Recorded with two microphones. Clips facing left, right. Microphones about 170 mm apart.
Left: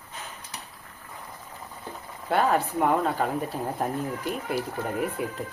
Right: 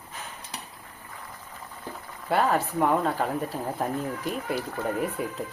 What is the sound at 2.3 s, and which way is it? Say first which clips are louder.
Speech: left 1 dB; centre (ahead or behind).